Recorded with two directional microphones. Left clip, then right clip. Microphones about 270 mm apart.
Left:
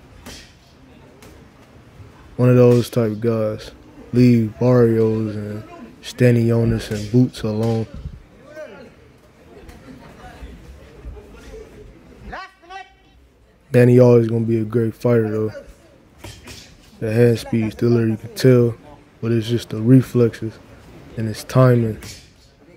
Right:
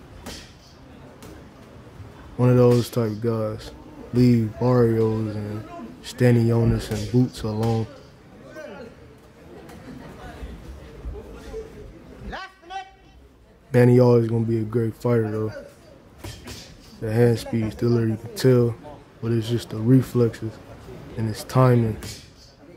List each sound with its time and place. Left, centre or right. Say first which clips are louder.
2.3 s a man's voice: left 4 dB; centre
12.3 s a sound: left 2 dB; left
13.7 s a man's voice: left 4 dB; centre
17.0 s a man's voice: left 4 dB; centre